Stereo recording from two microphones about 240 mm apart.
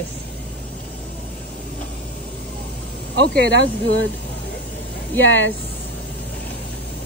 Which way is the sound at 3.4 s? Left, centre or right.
Left.